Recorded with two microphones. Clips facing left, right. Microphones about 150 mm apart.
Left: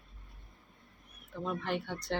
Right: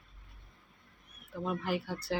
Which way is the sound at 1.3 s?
5° right (ahead or behind).